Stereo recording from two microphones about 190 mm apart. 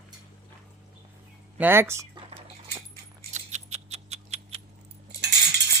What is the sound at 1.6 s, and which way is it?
Speech, 10° right (ahead or behind).